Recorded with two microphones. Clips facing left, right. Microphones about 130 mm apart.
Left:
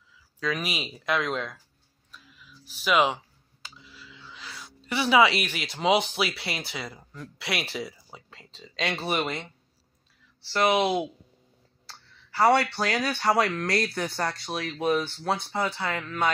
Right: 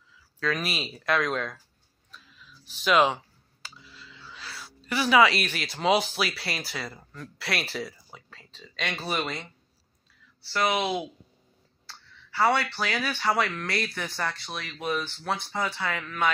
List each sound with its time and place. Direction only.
0.4 s speech: 15° left (ahead or behind)
2.0 s a sound: 10° left (ahead or behind)
5.4 s speech: 15° left (ahead or behind); by 9.0 s 30° left (ahead or behind)
9.0 s speech: 20° left (ahead or behind)
10.5 s speech: 25° left (ahead or behind)
12.8 s speech: 40° left (ahead or behind)